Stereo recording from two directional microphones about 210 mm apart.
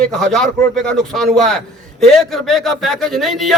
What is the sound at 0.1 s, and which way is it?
A man's voice, centre (ahead or behind).